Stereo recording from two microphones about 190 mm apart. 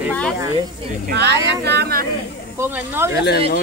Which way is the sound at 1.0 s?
60° right (ahead or behind).